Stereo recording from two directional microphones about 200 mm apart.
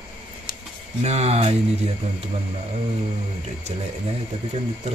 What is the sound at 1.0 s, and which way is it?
Speech, 35° right (ahead or behind).